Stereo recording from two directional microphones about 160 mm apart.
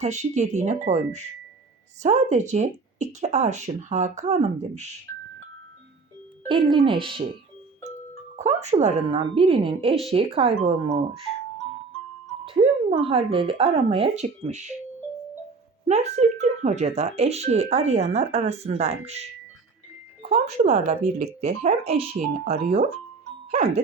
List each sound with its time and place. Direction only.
0.0 s speech: 45° right (ahead or behind)
6.5 s speech: 30° right (ahead or behind)
8.4 s speech: 45° right (ahead or behind)
12.5 s speech: 35° right (ahead or behind)
15.9 s speech: 45° right (ahead or behind)
20.2 s speech: 45° right (ahead or behind)